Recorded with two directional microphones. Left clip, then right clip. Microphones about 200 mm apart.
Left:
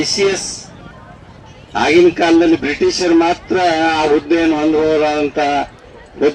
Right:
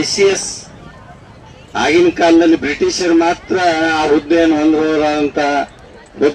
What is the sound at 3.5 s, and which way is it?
Speech, 50° right (ahead or behind).